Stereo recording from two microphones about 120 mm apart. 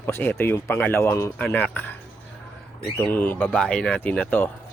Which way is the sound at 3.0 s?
15° left (ahead or behind).